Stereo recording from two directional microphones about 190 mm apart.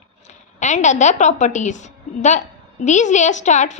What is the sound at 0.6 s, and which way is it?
A woman's voice, 40° left (ahead or behind).